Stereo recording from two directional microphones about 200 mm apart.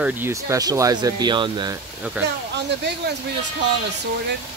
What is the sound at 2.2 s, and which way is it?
Speech, 10° right (ahead or behind).